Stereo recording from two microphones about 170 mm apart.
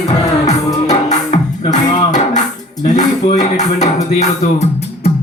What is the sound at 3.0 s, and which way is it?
Music, 45° left (ahead or behind).